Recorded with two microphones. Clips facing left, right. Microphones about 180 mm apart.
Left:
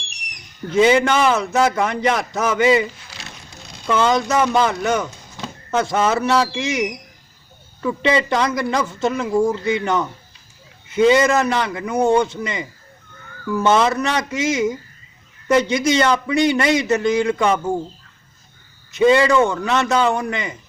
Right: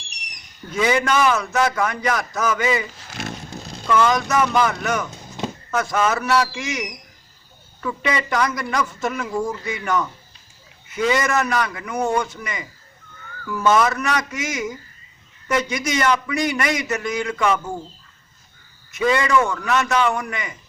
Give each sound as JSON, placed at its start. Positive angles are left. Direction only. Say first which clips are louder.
{"t": 0.7, "sound": "a man's voice", "louder": "left 5 dB", "side_deg": 25}
{"t": 3.0, "sound": "zipper", "louder": "right 9 dB", "side_deg": -50}
{"t": 3.8, "sound": "a man's voice", "louder": "left 1 dB", "side_deg": 25}
{"t": 18.9, "sound": "a man's voice", "louder": "left 5 dB", "side_deg": 25}